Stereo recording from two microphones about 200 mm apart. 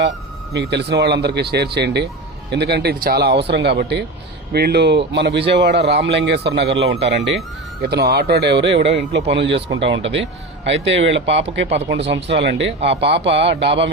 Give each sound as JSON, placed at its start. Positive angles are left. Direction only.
{"t": 0.5, "sound": "a man's voice", "side_deg": -60}